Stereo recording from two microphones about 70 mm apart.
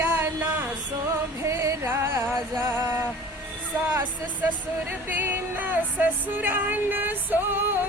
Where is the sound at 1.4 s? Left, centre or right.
Right.